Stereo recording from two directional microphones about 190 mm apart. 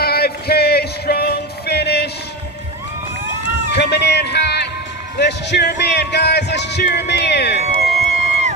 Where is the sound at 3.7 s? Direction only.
60° left (ahead or behind).